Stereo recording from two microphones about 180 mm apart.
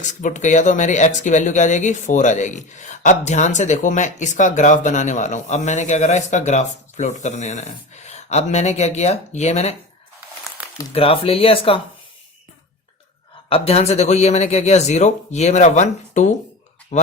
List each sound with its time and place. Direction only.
0.0 s speech: 45° left (ahead or behind)
10.9 s speech: 30° left (ahead or behind)
13.5 s speech: 35° left (ahead or behind)
16.9 s a sound: 35° left (ahead or behind)